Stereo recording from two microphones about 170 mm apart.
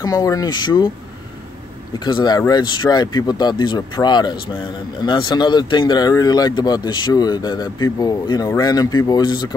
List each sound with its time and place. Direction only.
0.0 s speech: 20° left (ahead or behind)
2.0 s speech: 25° left (ahead or behind)